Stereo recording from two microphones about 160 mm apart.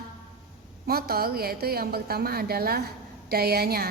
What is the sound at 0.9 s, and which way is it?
A woman's voice, 70° right (ahead or behind).